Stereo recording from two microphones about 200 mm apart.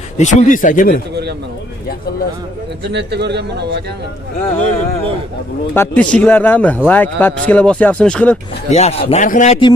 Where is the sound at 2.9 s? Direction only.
60° right (ahead or behind).